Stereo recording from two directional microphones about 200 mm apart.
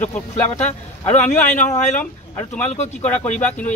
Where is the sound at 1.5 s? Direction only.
35° left (ahead or behind).